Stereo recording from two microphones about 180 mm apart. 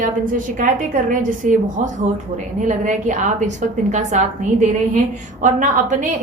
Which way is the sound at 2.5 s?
45° right (ahead or behind).